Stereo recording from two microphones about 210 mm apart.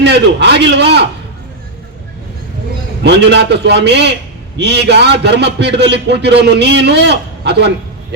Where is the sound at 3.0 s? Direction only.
55° right (ahead or behind).